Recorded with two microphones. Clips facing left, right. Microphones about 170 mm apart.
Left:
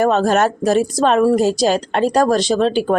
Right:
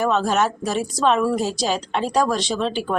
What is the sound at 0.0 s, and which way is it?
Speech, 45° left (ahead or behind).